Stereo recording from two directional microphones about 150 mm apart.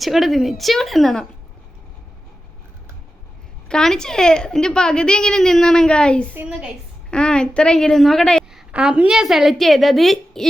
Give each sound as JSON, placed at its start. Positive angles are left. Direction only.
{"t": 0.0, "sound": "a woman's voice", "side_deg": 0}
{"t": 3.7, "sound": "a woman's voice", "side_deg": 5}
{"t": 6.3, "sound": "a woman's voice", "side_deg": -10}
{"t": 7.1, "sound": "a woman's voice", "side_deg": 5}